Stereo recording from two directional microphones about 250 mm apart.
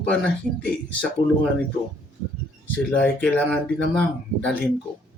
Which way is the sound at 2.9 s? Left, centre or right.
Centre.